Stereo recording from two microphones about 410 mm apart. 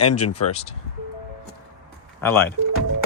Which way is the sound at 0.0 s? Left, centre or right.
Left.